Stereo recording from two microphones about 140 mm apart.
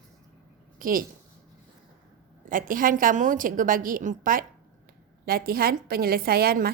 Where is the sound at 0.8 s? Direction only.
90° right.